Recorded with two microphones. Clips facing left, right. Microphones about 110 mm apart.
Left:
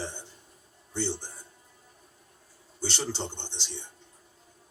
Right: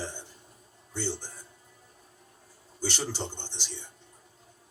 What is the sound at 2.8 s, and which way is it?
Speech, 20° left (ahead or behind).